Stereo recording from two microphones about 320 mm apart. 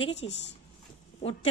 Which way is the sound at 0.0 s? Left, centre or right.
Centre.